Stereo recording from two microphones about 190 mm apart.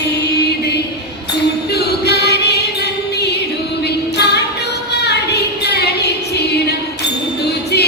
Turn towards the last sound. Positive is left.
turn(degrees=60)  # may be behind; listen again after turning